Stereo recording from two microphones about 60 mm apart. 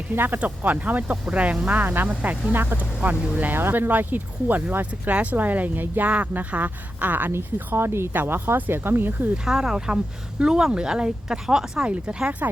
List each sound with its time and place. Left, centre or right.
0.1 s speech: right
7.3 s speech: right
9.5 s speech: centre
11.9 s speech: right